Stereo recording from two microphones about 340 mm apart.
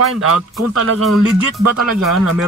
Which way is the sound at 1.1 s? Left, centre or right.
Centre.